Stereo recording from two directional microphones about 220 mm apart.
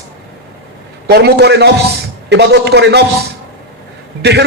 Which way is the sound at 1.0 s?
50° right (ahead or behind).